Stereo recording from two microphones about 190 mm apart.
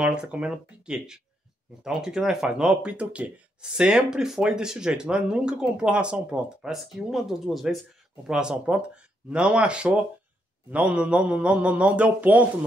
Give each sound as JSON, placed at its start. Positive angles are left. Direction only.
{"t": 0.0, "sound": "a man's voice", "side_deg": -5}